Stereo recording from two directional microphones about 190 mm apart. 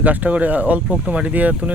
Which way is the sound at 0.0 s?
10° right (ahead or behind).